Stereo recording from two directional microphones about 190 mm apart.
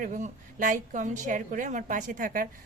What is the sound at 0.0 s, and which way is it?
A woman's voice, 40° right (ahead or behind).